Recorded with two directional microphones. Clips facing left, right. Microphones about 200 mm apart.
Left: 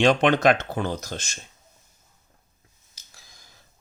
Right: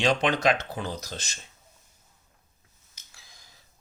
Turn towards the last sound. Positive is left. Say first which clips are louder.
# left 2 dB
turn(degrees=45)  # may be behind; listen again after turning